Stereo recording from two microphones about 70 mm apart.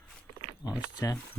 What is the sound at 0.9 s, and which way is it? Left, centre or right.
Speech, left.